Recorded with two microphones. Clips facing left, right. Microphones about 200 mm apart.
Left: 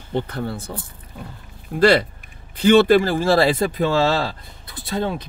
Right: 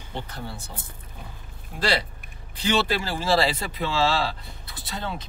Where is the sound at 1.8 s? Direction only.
55° left (ahead or behind).